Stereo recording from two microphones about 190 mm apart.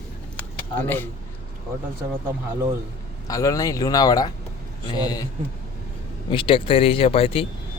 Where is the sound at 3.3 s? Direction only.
20° left (ahead or behind).